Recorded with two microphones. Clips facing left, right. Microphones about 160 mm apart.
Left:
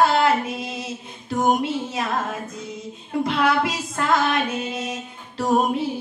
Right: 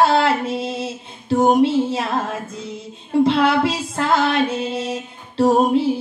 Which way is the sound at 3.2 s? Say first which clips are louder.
Right 5 dB; 30° right (ahead or behind).